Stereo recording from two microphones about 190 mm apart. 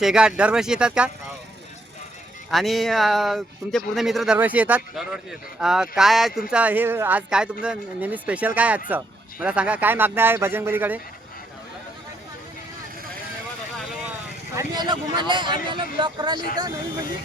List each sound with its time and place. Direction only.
0.0 s speech: 5° right (ahead or behind)
2.5 s speech: centre (ahead or behind)
14.5 s speech: 20° right (ahead or behind)